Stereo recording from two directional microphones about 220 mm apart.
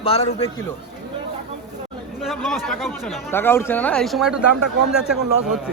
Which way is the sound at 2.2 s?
Centre (ahead or behind).